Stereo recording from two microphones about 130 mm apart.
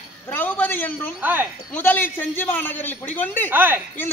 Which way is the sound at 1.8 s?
15° left (ahead or behind).